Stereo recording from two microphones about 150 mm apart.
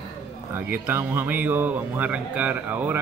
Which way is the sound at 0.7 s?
15° right (ahead or behind).